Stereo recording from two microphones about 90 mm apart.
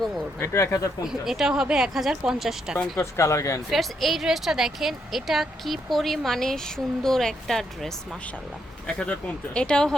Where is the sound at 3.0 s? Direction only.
35° left (ahead or behind).